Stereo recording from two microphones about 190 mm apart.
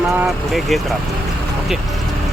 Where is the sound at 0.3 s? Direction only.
Centre (ahead or behind).